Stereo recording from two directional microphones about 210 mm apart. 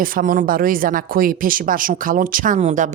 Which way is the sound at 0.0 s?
40° right (ahead or behind).